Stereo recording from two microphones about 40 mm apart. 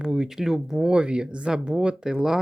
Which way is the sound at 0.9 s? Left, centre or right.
Right.